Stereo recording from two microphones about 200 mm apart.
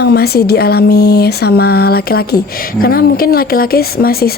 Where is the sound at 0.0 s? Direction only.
55° left (ahead or behind).